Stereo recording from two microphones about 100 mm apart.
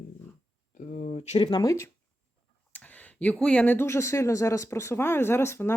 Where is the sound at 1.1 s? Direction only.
90° left.